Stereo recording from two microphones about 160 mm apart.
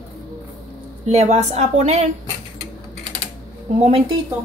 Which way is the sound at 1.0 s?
45° right (ahead or behind).